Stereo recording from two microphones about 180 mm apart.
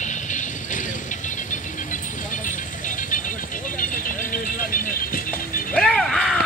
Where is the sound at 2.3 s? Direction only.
45° left (ahead or behind).